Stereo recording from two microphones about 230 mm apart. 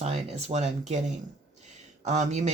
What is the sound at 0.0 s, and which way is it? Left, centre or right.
Speech, right.